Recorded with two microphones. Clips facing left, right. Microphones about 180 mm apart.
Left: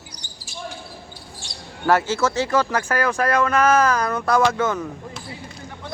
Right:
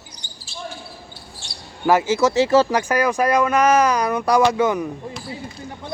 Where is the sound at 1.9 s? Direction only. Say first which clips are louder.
Right 3 dB; 10° right (ahead or behind).